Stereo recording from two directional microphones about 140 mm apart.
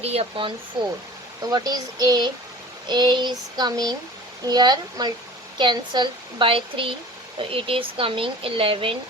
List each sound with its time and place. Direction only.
0.0 s speech: 45° right (ahead or behind)
1.5 s a child's voice: 30° right (ahead or behind)